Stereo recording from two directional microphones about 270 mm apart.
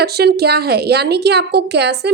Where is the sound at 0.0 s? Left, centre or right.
Right.